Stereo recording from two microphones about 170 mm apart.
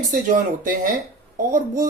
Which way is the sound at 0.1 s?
55° right (ahead or behind).